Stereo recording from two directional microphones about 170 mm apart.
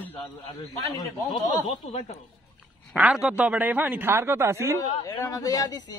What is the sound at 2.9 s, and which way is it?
A man's voice, 5° right (ahead or behind).